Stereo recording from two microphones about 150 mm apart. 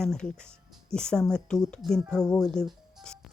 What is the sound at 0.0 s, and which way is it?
Speech, 5° left (ahead or behind).